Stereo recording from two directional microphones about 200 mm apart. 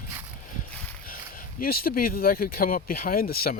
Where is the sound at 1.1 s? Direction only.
45° left (ahead or behind).